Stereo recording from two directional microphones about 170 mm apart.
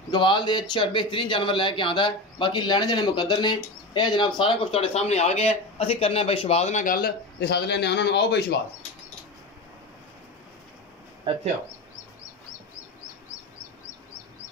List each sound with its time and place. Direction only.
0.1 s speech: 25° left (ahead or behind); by 8.5 s 75° left (ahead or behind)
11.3 s speech: 30° right (ahead or behind)